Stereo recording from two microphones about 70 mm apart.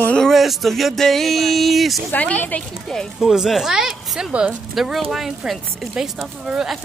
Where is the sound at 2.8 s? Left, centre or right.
Centre.